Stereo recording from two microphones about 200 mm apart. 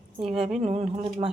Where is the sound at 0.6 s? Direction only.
30° right (ahead or behind).